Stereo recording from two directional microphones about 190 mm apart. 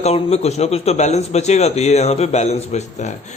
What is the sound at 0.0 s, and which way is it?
A man's voice, 35° left (ahead or behind).